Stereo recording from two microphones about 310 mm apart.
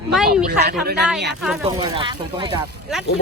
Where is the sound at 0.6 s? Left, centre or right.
Right.